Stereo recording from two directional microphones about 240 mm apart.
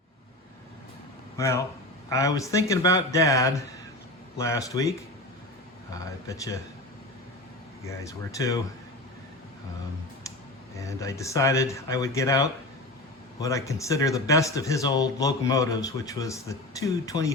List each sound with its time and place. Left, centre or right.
1.4 s speech: centre
8.4 s speech: centre
10.8 s speech: centre